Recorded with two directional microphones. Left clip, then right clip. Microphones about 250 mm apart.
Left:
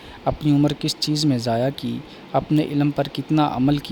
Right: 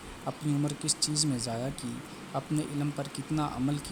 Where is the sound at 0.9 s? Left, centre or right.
Left.